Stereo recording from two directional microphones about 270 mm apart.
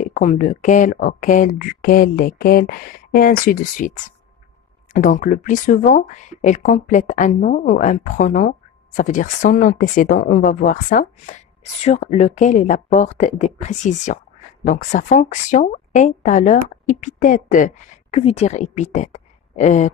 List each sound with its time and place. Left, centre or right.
0.0 s speech: left
4.9 s a woman's voice: left